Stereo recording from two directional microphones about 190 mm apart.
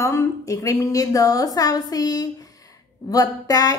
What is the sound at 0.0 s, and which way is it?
A woman's voice, 15° left (ahead or behind).